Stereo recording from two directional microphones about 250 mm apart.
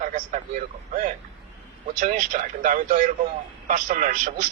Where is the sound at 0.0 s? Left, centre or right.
Right.